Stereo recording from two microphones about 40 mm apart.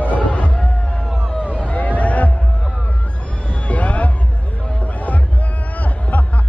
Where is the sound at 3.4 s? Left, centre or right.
Left.